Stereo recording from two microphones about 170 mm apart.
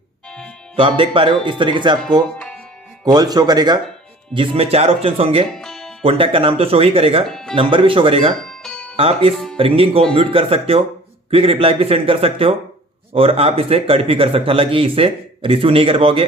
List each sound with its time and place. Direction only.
0.3 s music: 5° left (ahead or behind)
0.8 s speech: 30° right (ahead or behind)
4.4 s speech: 35° right (ahead or behind)
5.5 s music: centre (ahead or behind)
6.0 s speech: 35° right (ahead or behind)
7.3 s speech: 5° left (ahead or behind)
7.5 s speech: 30° right (ahead or behind)
8.4 s music: 5° left (ahead or behind)
9.0 s speech: 35° right (ahead or behind)
9.3 s speech: centre (ahead or behind)
9.6 s speech: 35° right (ahead or behind)